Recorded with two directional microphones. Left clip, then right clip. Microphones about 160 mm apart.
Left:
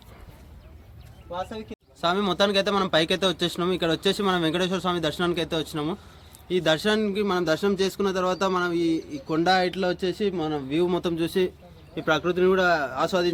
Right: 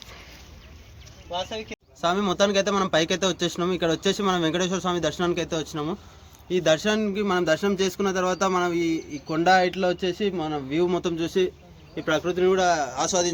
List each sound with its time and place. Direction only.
1.3 s a man's voice: 90° left
2.0 s a man's voice: centre (ahead or behind)
11.0 s speech: 45° left (ahead or behind)
11.9 s a man's voice: 90° left